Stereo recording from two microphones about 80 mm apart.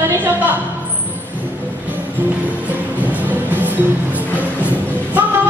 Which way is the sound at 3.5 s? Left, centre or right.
Right.